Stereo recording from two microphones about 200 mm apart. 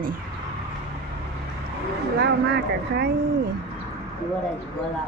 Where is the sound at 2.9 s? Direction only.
50° right (ahead or behind).